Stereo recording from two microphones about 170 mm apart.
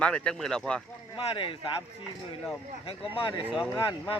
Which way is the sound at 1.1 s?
30° left (ahead or behind).